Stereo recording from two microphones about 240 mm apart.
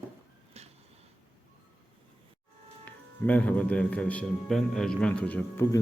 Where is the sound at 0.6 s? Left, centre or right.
Right.